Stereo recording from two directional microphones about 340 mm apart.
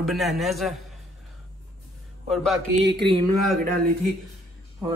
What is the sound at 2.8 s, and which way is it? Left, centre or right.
Speech, right.